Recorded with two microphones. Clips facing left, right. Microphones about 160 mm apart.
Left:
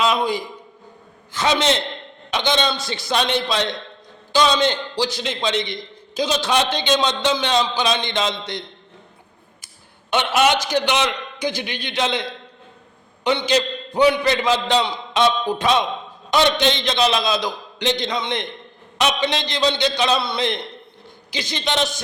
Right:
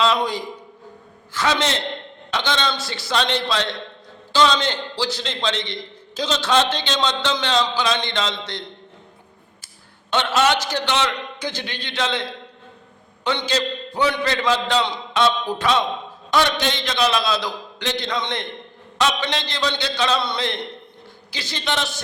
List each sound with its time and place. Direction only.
0.2 s a man's voice: 10° left (ahead or behind)
10.1 s a man's voice: 15° left (ahead or behind)
13.2 s a man's voice: 15° left (ahead or behind)